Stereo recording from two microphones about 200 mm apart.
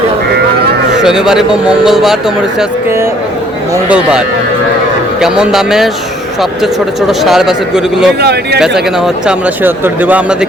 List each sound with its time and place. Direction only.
1.0 s speech: 5° right (ahead or behind)
3.8 s speech: 5° right (ahead or behind)
5.2 s speech: centre (ahead or behind)
7.1 s speech: centre (ahead or behind)
8.2 s speech: 55° right (ahead or behind)
8.6 s speech: centre (ahead or behind)